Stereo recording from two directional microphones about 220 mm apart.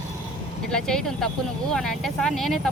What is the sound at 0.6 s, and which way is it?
Speech, 5° left (ahead or behind).